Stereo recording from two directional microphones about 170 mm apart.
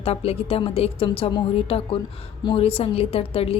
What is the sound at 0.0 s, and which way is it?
A woman's voice, 35° left (ahead or behind).